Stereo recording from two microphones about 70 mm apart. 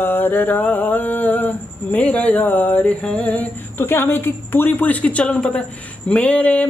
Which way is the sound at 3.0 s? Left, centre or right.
Centre.